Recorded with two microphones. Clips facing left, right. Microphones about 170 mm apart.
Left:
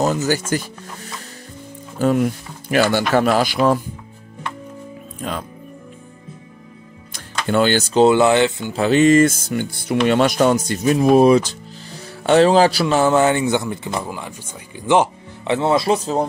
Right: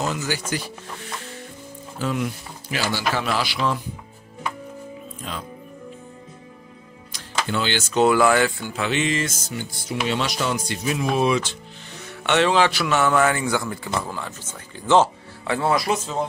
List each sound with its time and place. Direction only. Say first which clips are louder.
0.0 s speech: left 7 dB; 40° left (ahead or behind)
2.0 s speech: left 8 dB; 45° left (ahead or behind)
5.2 s speech: left 8 dB; 55° left (ahead or behind)
7.4 s speech: left 10 dB; 50° left (ahead or behind); by 8.7 s 20° left (ahead or behind)
8.7 s speech: left 13 dB; 40° left (ahead or behind)